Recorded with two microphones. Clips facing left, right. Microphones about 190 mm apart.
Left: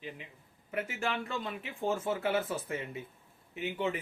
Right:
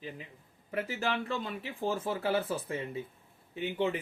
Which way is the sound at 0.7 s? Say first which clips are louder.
Right 2 dB; 35° right (ahead or behind).